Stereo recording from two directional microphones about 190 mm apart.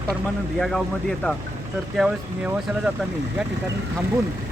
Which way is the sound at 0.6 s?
5° left (ahead or behind).